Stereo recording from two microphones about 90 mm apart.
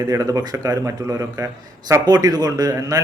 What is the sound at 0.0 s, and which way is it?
A man's voice, 35° right (ahead or behind).